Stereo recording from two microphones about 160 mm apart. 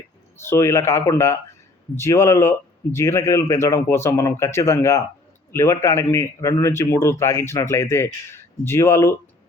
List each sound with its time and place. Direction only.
0.3 s a man's voice: 15° left (ahead or behind)